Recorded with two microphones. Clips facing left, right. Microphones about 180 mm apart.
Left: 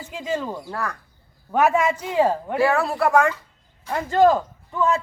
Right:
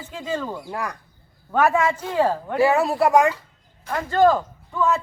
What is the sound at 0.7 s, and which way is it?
Speech, 15° right (ahead or behind).